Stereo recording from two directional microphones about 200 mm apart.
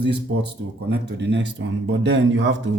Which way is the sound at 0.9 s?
60° right (ahead or behind).